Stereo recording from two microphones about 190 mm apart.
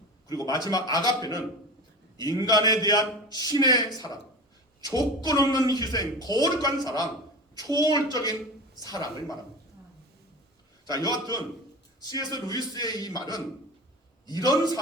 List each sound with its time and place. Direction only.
0.3 s a man's voice: 20° left (ahead or behind)
7.8 s a man's voice: 20° left (ahead or behind)
10.8 s a man's voice: 20° left (ahead or behind)
14.4 s a man's voice: 20° right (ahead or behind)